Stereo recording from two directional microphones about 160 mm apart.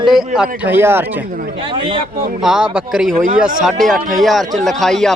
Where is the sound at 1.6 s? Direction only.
35° right (ahead or behind).